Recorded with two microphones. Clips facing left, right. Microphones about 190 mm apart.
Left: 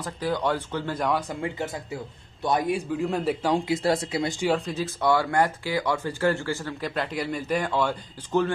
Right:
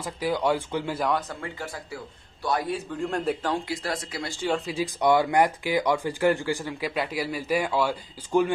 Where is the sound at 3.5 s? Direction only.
25° left (ahead or behind).